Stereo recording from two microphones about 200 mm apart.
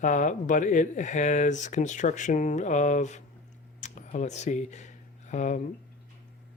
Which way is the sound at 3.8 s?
35° left (ahead or behind).